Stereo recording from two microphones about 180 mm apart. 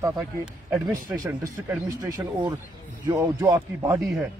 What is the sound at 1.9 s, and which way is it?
A man's voice, 20° right (ahead or behind).